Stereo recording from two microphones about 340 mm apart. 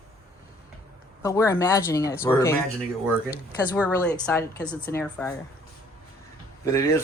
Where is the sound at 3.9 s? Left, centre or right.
Centre.